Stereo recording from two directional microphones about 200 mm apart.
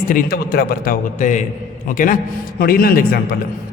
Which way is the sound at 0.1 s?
45° left (ahead or behind).